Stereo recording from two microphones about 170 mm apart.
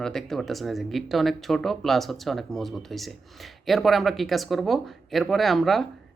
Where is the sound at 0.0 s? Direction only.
5° left (ahead or behind).